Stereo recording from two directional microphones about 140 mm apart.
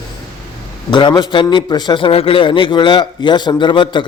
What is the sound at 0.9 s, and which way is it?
A man's voice, 30° left (ahead or behind).